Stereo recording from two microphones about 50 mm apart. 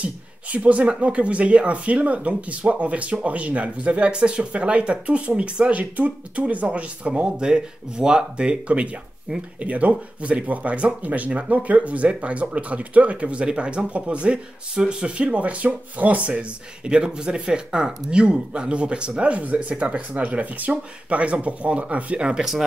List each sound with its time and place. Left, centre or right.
0.0 s speech: right
22.4 s speech: centre